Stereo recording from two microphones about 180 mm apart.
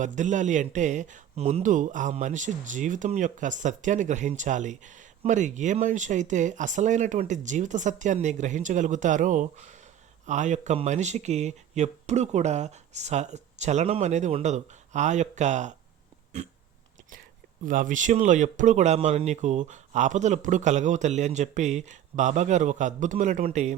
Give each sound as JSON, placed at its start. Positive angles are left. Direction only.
{"t": 0.0, "sound": "speech", "side_deg": -45}
{"t": 16.4, "sound": "a sound", "side_deg": -40}
{"t": 17.7, "sound": "speech", "side_deg": -45}